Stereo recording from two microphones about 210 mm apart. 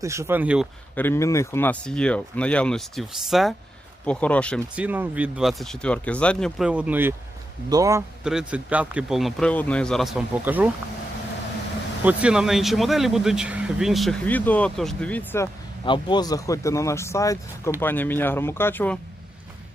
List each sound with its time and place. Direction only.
0.0 s speech: 15° right (ahead or behind)
0.9 s speech: 10° left (ahead or behind)
4.7 s speech: 5° right (ahead or behind)
8.2 s speech: 5° right (ahead or behind)
12.0 s speech: 5° right (ahead or behind)
15.8 s speech: 20° left (ahead or behind)